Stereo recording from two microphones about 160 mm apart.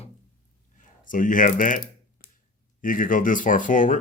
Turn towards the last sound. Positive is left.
turn(degrees=55)  # may be behind; listen again after turning